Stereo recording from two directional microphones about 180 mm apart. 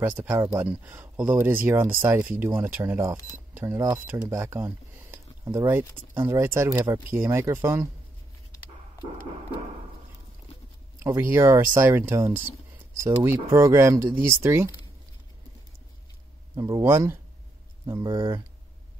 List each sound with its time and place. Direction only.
0.0 s speech: 10° right (ahead or behind)
11.0 s speech: 15° right (ahead or behind)
16.5 s speech: 20° right (ahead or behind)